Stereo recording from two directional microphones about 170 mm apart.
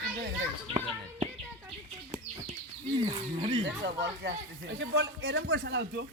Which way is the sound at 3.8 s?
75° right (ahead or behind).